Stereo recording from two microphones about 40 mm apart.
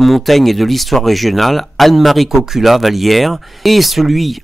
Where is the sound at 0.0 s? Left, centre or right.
Centre.